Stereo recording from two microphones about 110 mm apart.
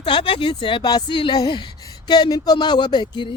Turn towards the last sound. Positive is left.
turn(degrees=45)  # may be behind; listen again after turning